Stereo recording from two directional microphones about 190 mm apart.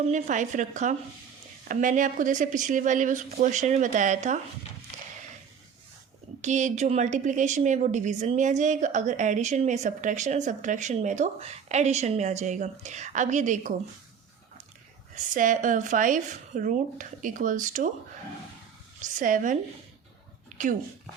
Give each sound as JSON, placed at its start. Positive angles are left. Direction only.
{"t": 0.0, "sound": "a woman's voice", "side_deg": -40}
{"t": 6.4, "sound": "a woman's voice", "side_deg": -40}
{"t": 15.1, "sound": "speech", "side_deg": -45}
{"t": 19.0, "sound": "speech", "side_deg": -45}